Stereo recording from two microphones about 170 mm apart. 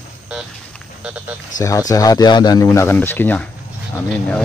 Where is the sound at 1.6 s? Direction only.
20° left (ahead or behind).